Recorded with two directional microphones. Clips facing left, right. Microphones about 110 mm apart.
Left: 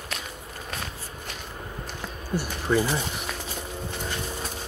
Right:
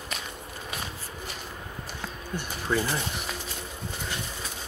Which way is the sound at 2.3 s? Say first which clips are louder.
Left 4 dB; 15° left (ahead or behind).